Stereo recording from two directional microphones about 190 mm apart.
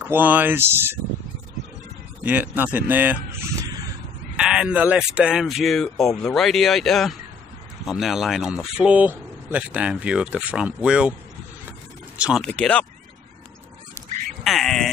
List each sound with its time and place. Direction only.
0.0 s speech: 10° right (ahead or behind)
2.2 s speech: 10° right (ahead or behind)
4.4 s speech: 5° right (ahead or behind)
12.2 s speech: centre (ahead or behind)
14.4 s speech: centre (ahead or behind)